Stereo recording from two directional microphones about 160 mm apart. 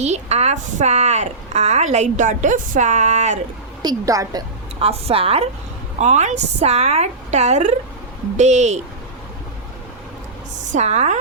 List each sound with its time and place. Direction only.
0.0 s a woman's voice: 45° right (ahead or behind)
3.8 s a woman's voice: 20° right (ahead or behind)
4.8 s a woman's voice: 35° right (ahead or behind)
10.6 s a woman's voice: 45° right (ahead or behind)